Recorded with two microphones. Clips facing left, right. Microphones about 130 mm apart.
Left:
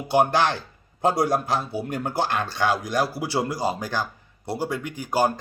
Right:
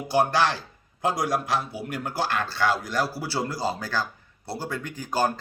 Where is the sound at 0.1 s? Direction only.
20° left (ahead or behind).